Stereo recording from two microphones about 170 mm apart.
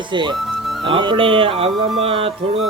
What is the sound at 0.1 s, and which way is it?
Music, 25° right (ahead or behind).